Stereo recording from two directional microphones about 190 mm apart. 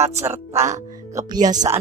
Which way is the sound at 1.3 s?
20° right (ahead or behind).